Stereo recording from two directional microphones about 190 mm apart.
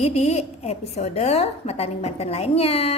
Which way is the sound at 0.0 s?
35° left (ahead or behind).